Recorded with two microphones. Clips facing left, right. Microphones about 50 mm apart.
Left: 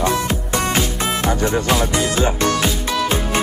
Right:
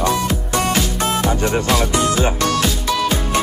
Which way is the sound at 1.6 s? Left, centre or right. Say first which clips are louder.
Right 1 dB; left.